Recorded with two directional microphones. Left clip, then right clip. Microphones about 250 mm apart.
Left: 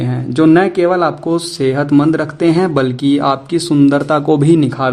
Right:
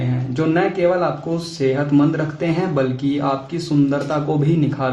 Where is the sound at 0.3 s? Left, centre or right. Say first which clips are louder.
Left 8 dB; left.